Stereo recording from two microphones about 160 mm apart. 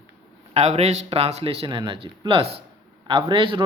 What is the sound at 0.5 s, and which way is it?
Speech, 40° right (ahead or behind).